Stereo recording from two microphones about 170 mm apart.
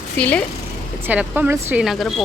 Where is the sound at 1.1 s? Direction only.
10° right (ahead or behind).